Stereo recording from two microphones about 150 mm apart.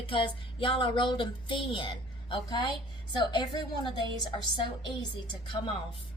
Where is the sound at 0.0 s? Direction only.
35° left (ahead or behind).